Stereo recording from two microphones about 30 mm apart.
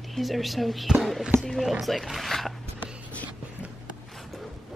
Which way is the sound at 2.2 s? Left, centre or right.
Centre.